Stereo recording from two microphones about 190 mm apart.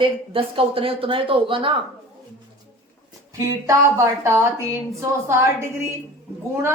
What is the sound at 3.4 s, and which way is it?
A woman's voice, 15° right (ahead or behind).